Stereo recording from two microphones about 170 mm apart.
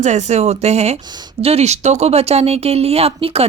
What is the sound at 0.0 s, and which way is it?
Speech, 45° right (ahead or behind).